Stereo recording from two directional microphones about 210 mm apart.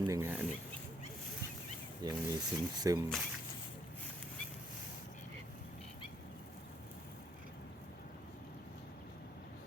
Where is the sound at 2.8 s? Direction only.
15° right (ahead or behind).